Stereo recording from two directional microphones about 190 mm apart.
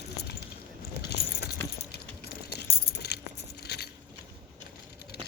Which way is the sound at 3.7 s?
60° left (ahead or behind).